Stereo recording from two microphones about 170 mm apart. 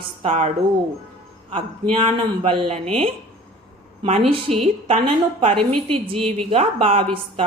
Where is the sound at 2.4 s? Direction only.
35° right (ahead or behind).